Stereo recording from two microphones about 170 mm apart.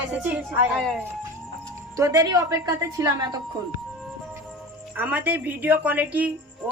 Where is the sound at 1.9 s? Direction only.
20° right (ahead or behind).